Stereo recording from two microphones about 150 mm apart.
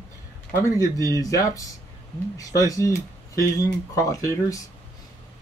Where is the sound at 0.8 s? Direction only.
20° left (ahead or behind).